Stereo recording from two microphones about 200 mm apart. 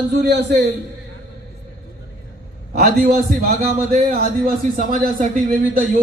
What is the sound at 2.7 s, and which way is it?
A man's voice, 55° right (ahead or behind).